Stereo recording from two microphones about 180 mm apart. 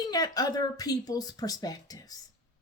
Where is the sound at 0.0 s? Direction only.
20° left (ahead or behind).